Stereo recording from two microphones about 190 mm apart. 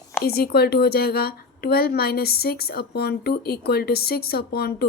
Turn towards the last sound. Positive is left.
turn(degrees=55)  # may be behind; listen again after turning